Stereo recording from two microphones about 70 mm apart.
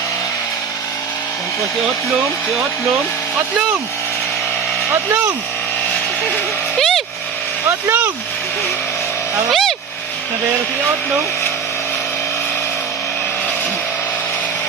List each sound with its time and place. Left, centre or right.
6.7 s vehicle: centre
7.9 s speech: right
9.5 s vehicle: centre